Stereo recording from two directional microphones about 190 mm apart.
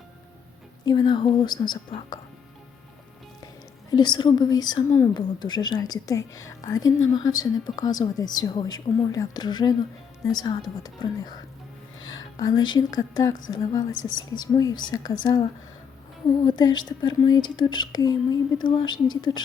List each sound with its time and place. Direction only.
0.9 s a woman's voice: 25° left (ahead or behind)
3.9 s a woman's voice: 20° left (ahead or behind)
11.9 s music: 90° left
12.4 s a woman's voice: 20° left (ahead or behind)
14.1 s a woman's voice: 90° left
14.5 s a woman's voice: 20° left (ahead or behind)